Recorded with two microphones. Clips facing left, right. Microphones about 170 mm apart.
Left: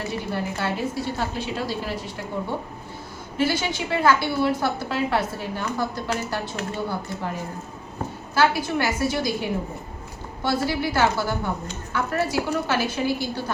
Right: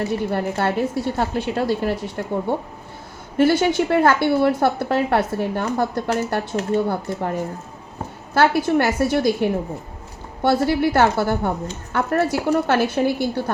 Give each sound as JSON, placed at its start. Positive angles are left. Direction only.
{"t": 0.3, "sound": "a woman's voice", "side_deg": -55}
{"t": 3.3, "sound": "a woman's voice", "side_deg": -60}